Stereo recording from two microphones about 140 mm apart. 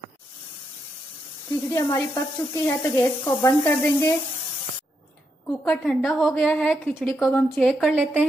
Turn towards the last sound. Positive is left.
turn(degrees=5)  # may be behind; listen again after turning